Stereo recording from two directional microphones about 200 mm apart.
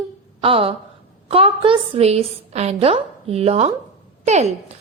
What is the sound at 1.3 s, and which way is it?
A woman's voice, 25° right (ahead or behind).